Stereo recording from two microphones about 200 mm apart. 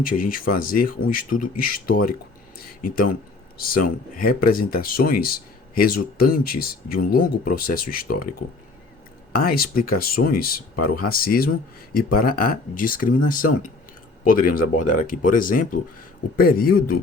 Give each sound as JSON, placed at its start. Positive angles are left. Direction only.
{"t": 0.0, "sound": "speech", "side_deg": 45}